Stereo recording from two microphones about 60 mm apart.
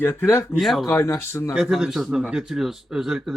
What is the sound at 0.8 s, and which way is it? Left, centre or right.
Speech, left.